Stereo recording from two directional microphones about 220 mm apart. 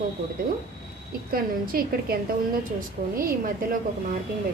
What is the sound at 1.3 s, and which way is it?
A woman's voice, 40° right (ahead or behind).